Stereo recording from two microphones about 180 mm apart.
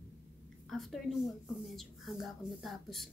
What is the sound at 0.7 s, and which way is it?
A woman's voice, centre (ahead or behind).